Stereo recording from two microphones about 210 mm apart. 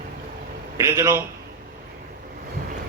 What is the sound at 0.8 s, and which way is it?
Speech, 15° right (ahead or behind).